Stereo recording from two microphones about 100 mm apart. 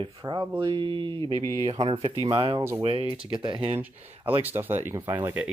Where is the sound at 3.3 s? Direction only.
55° right (ahead or behind).